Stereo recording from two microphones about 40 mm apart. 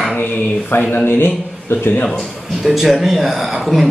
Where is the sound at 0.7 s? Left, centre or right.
Left.